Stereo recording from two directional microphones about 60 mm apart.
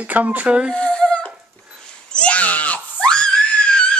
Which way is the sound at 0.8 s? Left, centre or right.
Centre.